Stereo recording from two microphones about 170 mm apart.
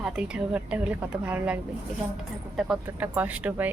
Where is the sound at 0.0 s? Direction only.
5° right (ahead or behind).